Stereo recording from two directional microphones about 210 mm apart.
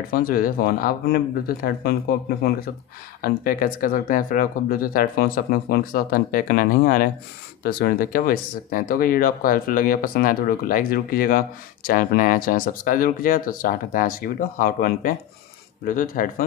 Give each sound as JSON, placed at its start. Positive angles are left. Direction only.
{"t": 0.1, "sound": "speech", "side_deg": 45}